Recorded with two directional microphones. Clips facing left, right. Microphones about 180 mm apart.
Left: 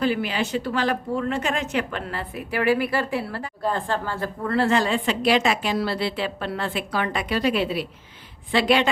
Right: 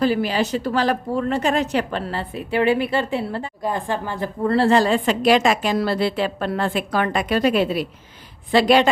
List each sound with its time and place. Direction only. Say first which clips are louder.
0.0 s a woman's voice: right 4 dB; 40° right (ahead or behind); by 4.3 s 15° right (ahead or behind)
4.4 s a woman's voice: right 5 dB; 30° right (ahead or behind)